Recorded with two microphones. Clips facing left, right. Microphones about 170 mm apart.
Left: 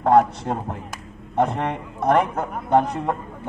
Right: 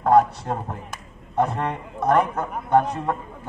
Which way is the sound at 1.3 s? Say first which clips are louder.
Left 1 dB; 20° left (ahead or behind).